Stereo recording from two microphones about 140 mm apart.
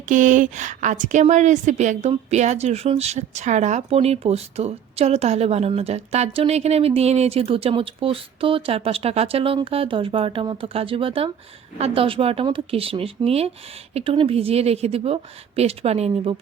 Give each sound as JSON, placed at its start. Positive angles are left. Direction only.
{"t": 0.1, "sound": "a woman's voice", "side_deg": -65}